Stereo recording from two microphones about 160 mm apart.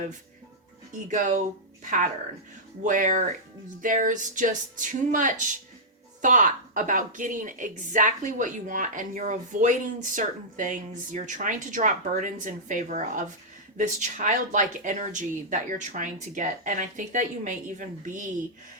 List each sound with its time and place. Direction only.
1.0 s a woman's voice: 50° right (ahead or behind)